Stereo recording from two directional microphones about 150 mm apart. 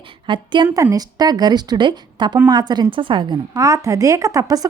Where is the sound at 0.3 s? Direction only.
30° right (ahead or behind).